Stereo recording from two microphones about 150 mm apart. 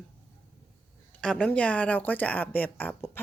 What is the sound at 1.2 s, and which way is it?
A woman's voice, 5° left (ahead or behind).